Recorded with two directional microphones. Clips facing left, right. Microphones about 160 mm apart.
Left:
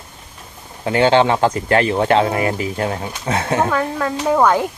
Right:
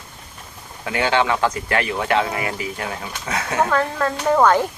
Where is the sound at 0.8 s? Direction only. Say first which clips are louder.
Left 6 dB; 30° left (ahead or behind).